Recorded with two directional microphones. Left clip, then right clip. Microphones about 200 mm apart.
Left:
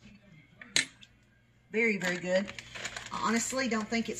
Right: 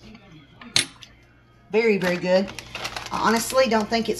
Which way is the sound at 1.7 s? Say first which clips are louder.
Right 9 dB; 25° right (ahead or behind).